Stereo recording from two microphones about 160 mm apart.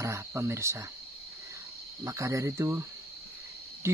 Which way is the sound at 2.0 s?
20° right (ahead or behind).